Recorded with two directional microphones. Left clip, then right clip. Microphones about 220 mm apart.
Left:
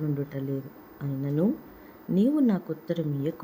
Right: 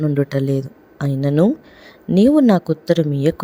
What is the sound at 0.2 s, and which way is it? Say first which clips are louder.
Speech: right 14 dB; 45° right (ahead or behind).